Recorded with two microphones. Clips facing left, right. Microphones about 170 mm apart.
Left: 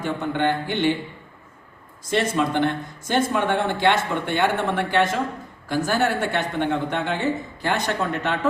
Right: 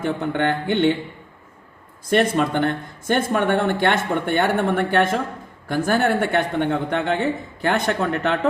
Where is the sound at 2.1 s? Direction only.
60° right (ahead or behind).